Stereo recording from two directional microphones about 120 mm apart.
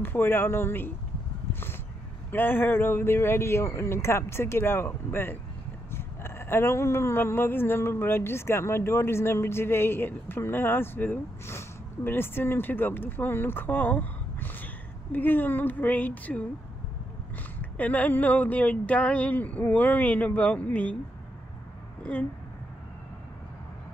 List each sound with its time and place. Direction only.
0.0 s speech: 20° left (ahead or behind)
1.5 s a sound: 20° left (ahead or behind)
2.3 s speech: 15° left (ahead or behind)
17.6 s speech: 15° left (ahead or behind)
22.0 s speech: 10° left (ahead or behind)